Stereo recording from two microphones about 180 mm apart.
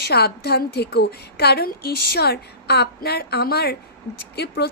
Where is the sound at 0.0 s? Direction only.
60° left (ahead or behind).